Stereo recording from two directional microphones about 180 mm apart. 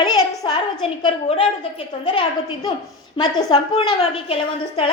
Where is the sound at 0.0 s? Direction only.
25° left (ahead or behind).